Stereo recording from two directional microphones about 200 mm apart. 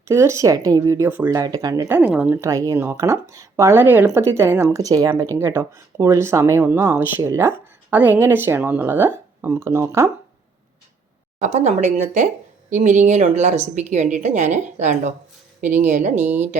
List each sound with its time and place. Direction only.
0.1 s speech: 15° right (ahead or behind)
11.3 s a woman's voice: 35° right (ahead or behind)